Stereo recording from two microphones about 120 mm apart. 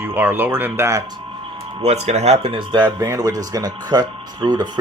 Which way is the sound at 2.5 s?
40° right (ahead or behind).